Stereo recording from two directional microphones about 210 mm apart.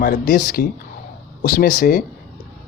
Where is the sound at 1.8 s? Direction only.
45° left (ahead or behind).